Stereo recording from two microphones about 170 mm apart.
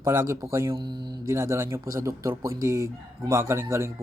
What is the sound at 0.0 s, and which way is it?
Speech, 15° right (ahead or behind).